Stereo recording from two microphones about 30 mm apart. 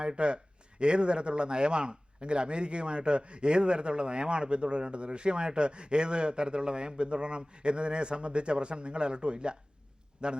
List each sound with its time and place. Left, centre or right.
0.0 s a man's voice: right